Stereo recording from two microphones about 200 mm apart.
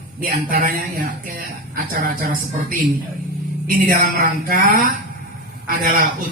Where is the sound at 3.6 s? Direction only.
45° right (ahead or behind).